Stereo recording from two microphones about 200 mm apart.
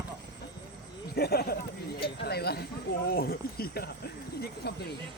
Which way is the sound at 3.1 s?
50° left (ahead or behind).